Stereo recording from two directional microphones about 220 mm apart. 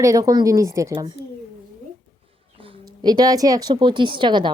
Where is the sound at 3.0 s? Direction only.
15° right (ahead or behind).